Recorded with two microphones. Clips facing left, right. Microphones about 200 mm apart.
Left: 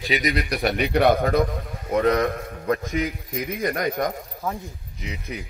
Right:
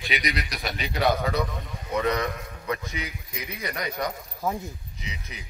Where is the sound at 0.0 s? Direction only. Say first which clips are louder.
Left 6 dB; 40° left (ahead or behind).